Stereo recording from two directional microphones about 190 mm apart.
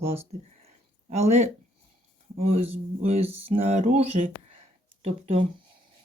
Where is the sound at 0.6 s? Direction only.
35° right (ahead or behind).